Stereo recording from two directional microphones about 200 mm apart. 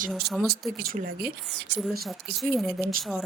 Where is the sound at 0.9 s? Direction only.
45° right (ahead or behind).